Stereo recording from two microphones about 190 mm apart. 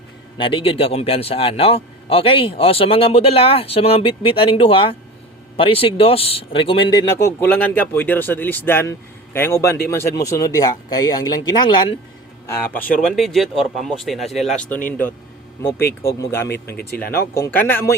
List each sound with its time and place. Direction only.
0.3 s a man's voice: 25° left (ahead or behind)
13.0 s speech: centre (ahead or behind)
16.5 s speech: 55° left (ahead or behind)
17.3 s speech: 10° left (ahead or behind)